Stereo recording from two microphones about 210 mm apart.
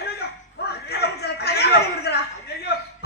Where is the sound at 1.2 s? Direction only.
50° left (ahead or behind).